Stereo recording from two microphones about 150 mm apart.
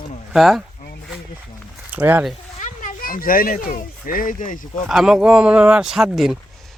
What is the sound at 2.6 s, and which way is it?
Speech, 60° left (ahead or behind).